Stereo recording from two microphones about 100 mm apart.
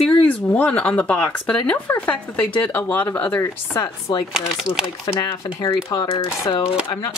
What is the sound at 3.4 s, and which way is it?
Speech, 30° left (ahead or behind).